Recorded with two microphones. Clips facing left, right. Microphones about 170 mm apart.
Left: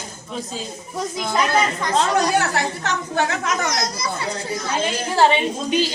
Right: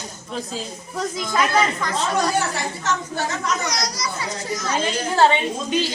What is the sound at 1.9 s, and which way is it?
A woman's voice, 70° left (ahead or behind).